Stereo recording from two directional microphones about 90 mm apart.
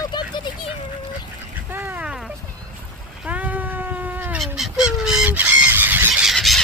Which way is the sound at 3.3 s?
20° right (ahead or behind).